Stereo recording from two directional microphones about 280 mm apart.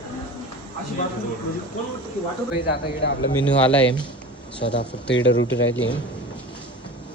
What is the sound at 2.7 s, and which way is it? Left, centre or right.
Speech, left.